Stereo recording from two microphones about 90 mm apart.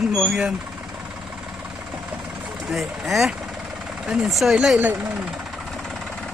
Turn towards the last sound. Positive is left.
turn(degrees=0)  # may be behind; listen again after turning